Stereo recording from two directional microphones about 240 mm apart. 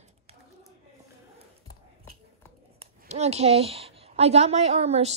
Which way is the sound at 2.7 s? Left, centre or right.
Right.